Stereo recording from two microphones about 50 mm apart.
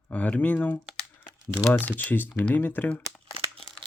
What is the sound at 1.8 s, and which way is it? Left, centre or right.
Speech, left.